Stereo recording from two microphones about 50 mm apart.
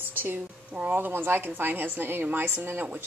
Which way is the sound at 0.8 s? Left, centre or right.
Right.